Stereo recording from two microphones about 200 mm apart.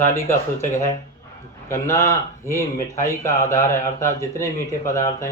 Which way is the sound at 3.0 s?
15° left (ahead or behind).